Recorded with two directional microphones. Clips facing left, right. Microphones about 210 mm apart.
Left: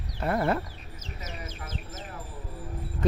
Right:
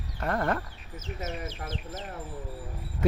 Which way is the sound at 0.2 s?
10° left (ahead or behind).